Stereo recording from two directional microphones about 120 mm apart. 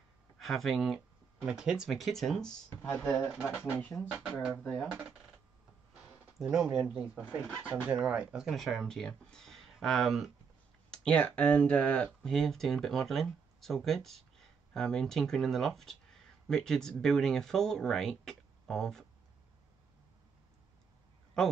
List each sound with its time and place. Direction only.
0.4 s speech: centre (ahead or behind); by 3.3 s 15° left (ahead or behind)
3.3 s speech: 5° right (ahead or behind)
6.3 s speech: 5° right (ahead or behind)
11.1 s speech: 10° left (ahead or behind)